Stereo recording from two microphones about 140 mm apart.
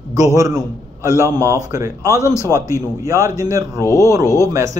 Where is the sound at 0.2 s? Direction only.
20° right (ahead or behind).